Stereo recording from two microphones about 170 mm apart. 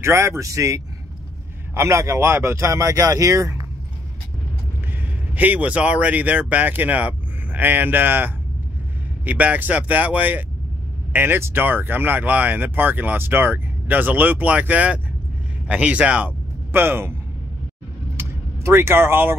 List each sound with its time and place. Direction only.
0.0 s speech: 15° right (ahead or behind)
5.3 s speech: 10° right (ahead or behind)
18.1 s vehicle: 15° right (ahead or behind)